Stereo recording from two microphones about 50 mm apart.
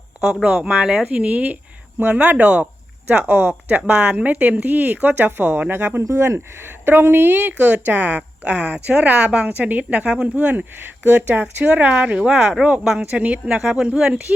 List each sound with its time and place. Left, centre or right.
0.4 s a woman's voice: right
6.0 s a woman's voice: right
13.6 s speech: centre
14.3 s speech: right